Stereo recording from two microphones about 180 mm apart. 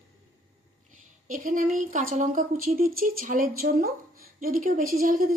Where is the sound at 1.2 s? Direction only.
50° right (ahead or behind).